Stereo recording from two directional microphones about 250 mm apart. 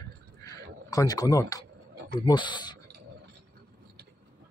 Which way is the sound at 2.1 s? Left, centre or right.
Centre.